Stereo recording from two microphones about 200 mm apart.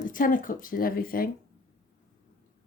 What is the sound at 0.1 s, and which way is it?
Speech, 45° left (ahead or behind).